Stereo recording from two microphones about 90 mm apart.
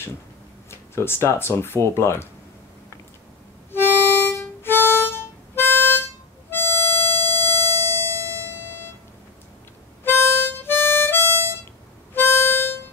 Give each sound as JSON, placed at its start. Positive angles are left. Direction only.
{"t": 0.7, "sound": "speech", "side_deg": 25}
{"t": 3.7, "sound": "harmonica", "side_deg": 25}
{"t": 6.5, "sound": "music", "side_deg": 30}
{"t": 10.0, "sound": "harmonica", "side_deg": 25}